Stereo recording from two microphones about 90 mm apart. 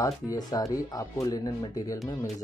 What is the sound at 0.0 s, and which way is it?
Speech, 40° left (ahead or behind).